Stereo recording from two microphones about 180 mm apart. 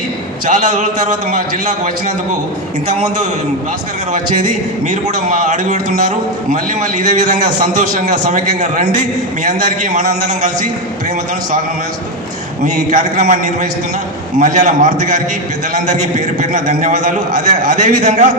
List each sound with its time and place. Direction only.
0.4 s a man's voice: 45° right (ahead or behind)
5.0 s a man's voice: 45° right (ahead or behind)
7.8 s a man's voice: 45° right (ahead or behind)
12.6 s a man's voice: 45° right (ahead or behind)